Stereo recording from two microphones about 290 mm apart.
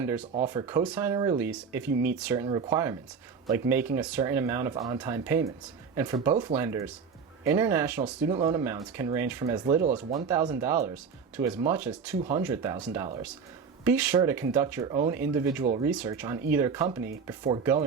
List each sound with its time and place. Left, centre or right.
0.0 s speech: centre
15.9 s speech: centre